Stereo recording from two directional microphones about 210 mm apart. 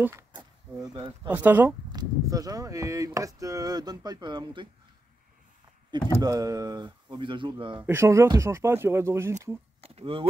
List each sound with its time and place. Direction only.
0.0 s a sound: 15° right (ahead or behind)
1.3 s speech: 10° right (ahead or behind)
6.2 s speech: 15° right (ahead or behind)
7.8 s speech: 10° right (ahead or behind)
9.8 s speech: 25° right (ahead or behind)